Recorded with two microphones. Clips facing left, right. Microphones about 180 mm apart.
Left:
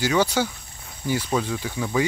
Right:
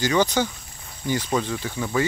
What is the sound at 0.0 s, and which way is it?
Speech, 10° left (ahead or behind).